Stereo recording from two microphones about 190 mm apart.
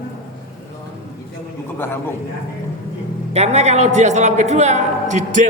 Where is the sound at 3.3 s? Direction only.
35° right (ahead or behind).